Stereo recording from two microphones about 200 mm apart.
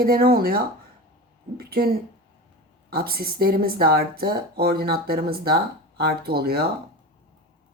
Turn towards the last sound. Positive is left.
turn(degrees=-50)  # may be behind; listen again after turning